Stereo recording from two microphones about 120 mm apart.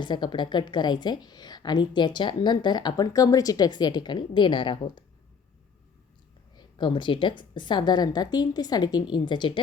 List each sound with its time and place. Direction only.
0.0 s a woman's voice: 40° left (ahead or behind)
6.6 s a woman's voice: 40° left (ahead or behind)